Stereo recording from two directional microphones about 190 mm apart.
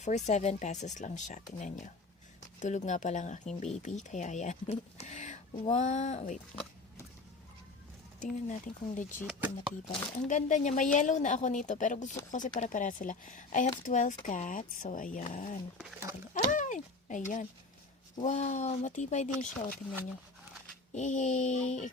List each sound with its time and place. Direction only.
0.3 s speech: 35° left (ahead or behind)
8.2 s speech: 40° left (ahead or behind)
9.2 s speech: 5° right (ahead or behind)
10.2 s speech: 40° left (ahead or behind)
20.9 s speech: 40° left (ahead or behind)